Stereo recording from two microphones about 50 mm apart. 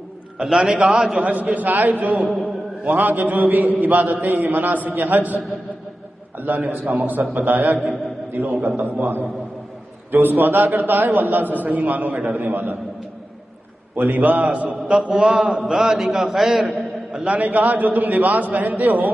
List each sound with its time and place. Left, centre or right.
0.4 s a man's voice: centre
1.2 s a man's voice: right
2.1 s a man's voice: centre
3.0 s a man's voice: right
10.2 s a man's voice: right
13.9 s a man's voice: right
14.9 s a man's voice: centre
17.1 s a man's voice: right